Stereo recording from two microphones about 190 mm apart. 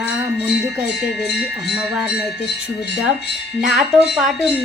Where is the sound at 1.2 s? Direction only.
60° left (ahead or behind).